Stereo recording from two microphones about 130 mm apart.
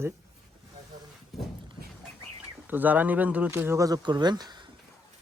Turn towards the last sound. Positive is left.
turn(degrees=-35)  # may be behind; listen again after turning